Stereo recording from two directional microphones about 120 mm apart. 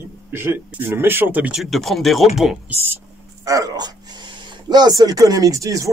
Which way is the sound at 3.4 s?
30° right (ahead or behind).